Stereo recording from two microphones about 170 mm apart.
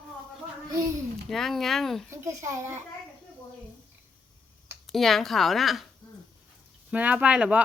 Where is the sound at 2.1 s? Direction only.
15° right (ahead or behind).